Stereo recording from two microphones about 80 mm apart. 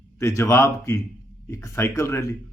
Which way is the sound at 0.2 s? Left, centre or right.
Left.